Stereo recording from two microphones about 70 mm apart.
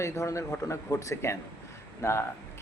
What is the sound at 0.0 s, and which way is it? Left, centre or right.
Speech, left.